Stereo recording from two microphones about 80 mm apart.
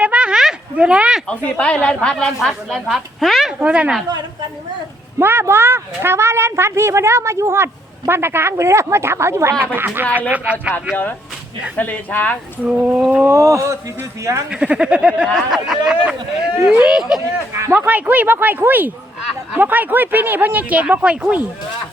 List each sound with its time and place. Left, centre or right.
0.0 s a sound: centre
1.3 s a woman's voice: centre
3.6 s speech: centre
5.2 s speech: right
11.8 s speech: left
12.6 s speech: centre
13.2 s speech: right
14.5 s speech: centre
17.5 s speech: right
17.7 s speech: centre